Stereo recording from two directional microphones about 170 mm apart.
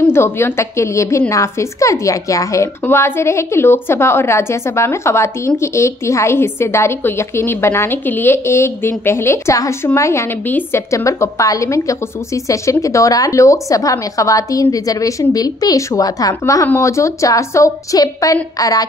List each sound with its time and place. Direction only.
0.0 s a woman's voice: 15° left (ahead or behind)